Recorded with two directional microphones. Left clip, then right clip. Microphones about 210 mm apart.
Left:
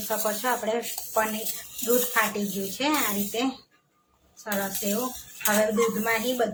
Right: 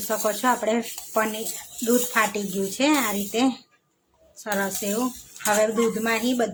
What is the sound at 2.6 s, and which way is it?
Speech, 35° right (ahead or behind).